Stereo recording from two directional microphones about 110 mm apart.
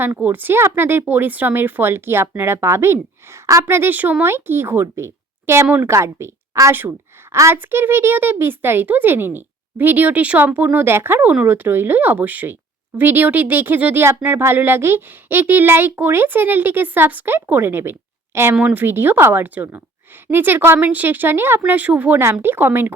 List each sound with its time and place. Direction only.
0.2 s speech: 15° right (ahead or behind)